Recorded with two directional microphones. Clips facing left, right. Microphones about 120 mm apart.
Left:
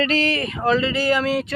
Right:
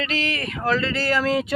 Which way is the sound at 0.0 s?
40° left (ahead or behind).